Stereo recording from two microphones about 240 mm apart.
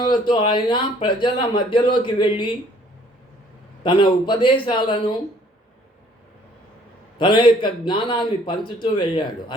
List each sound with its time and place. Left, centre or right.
0.0 s speech: centre
3.8 s speech: centre
7.2 s speech: centre